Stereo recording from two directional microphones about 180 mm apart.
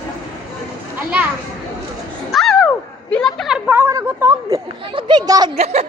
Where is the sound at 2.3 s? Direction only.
Centre (ahead or behind); by 5.5 s 20° right (ahead or behind).